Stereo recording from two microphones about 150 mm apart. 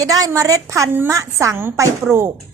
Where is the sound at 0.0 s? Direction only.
25° right (ahead or behind).